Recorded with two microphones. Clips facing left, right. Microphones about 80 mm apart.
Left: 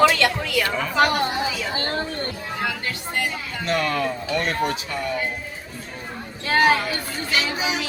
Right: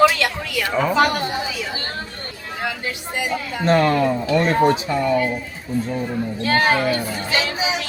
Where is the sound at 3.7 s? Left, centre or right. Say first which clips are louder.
Right 7 dB; right.